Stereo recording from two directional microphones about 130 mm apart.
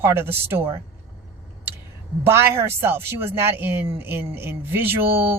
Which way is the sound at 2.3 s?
20° right (ahead or behind).